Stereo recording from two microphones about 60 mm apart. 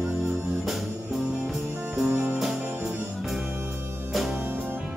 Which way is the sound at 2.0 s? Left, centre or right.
Centre.